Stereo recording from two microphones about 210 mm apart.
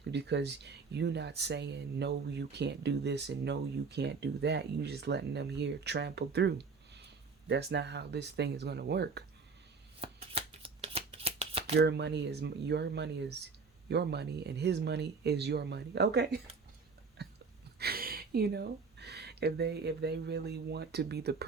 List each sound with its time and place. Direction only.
0.1 s speech: 55° right (ahead or behind)
10.0 s shuffling cards: 30° right (ahead or behind)
11.8 s speech: 55° right (ahead or behind)
17.7 s speech: 45° right (ahead or behind)